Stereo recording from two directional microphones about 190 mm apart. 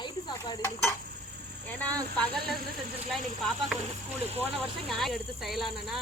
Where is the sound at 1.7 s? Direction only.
10° left (ahead or behind).